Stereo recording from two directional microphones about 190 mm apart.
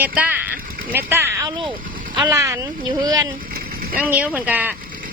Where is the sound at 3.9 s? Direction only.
10° right (ahead or behind).